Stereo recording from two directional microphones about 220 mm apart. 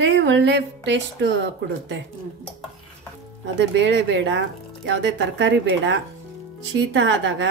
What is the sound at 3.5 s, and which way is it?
Speech, 55° right (ahead or behind).